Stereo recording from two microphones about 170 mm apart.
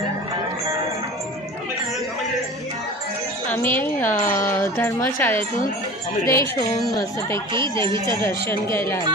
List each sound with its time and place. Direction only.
3.5 s wind chime: 10° left (ahead or behind)
4.5 s music: 15° left (ahead or behind)
6.2 s speech: 15° left (ahead or behind)